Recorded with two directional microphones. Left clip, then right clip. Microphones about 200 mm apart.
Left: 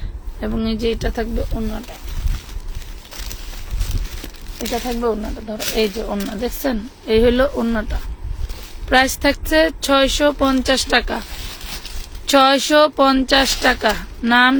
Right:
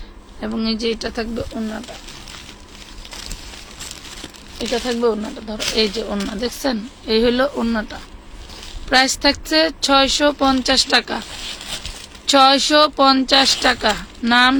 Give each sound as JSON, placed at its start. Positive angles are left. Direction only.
{"t": 0.3, "sound": "speech", "side_deg": 20}
{"t": 4.7, "sound": "speech", "side_deg": 0}
{"t": 12.2, "sound": "speech", "side_deg": 25}